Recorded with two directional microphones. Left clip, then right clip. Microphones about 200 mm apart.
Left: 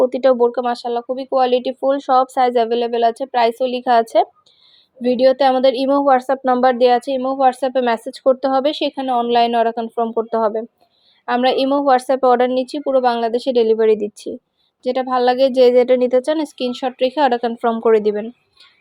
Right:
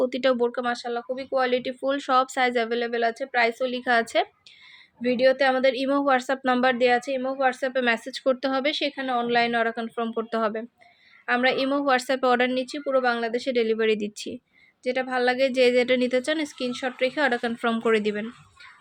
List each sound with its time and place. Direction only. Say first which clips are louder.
0.0 s speech: left 9 dB; centre (ahead or behind); by 1.7 s 15° left (ahead or behind)
1.8 s speech: left 7 dB; centre (ahead or behind)
5.0 s speech: left 7 dB; 20° left (ahead or behind); by 6.7 s centre (ahead or behind)
6.7 s speech: left 8 dB; 15° left (ahead or behind)
8.1 s speech: left 9 dB; centre (ahead or behind)
8.7 s speech: left 7 dB; 15° left (ahead or behind)
11.3 s speech: left 7 dB; 15° left (ahead or behind)
12.6 s speech: left 7 dB; 15° left (ahead or behind)
14.8 s speech: left 8 dB; 20° left (ahead or behind)
16.6 s speech: left 7 dB; 20° left (ahead or behind)